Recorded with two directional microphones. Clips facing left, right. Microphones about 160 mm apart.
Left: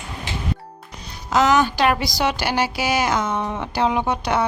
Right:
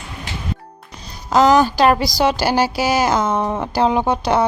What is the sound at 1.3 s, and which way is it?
A woman's voice, 35° right (ahead or behind).